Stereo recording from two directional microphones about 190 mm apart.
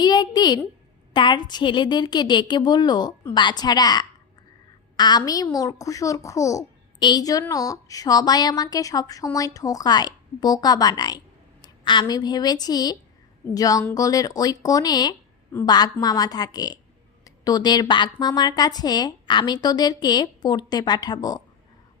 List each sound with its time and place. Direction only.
0.0 s a woman's voice: 20° left (ahead or behind)